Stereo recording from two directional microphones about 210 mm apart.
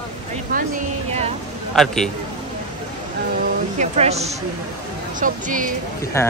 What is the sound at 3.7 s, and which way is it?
Speech, 30° right (ahead or behind).